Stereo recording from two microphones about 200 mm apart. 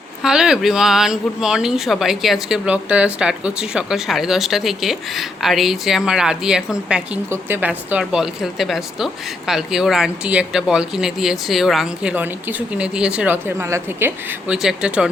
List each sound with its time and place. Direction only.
0.2 s speech: 5° right (ahead or behind)